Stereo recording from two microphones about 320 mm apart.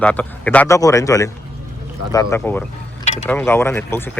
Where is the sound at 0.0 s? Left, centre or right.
Centre.